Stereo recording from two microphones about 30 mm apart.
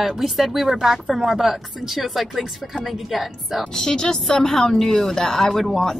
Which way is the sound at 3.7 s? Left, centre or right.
Centre.